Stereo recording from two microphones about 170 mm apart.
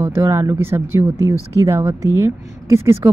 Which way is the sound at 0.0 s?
15° right (ahead or behind).